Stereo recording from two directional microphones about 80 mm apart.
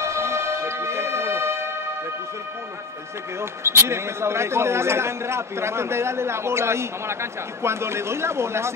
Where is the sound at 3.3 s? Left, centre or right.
Right.